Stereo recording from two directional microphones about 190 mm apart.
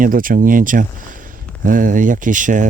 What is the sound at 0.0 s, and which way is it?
Speech, 45° right (ahead or behind).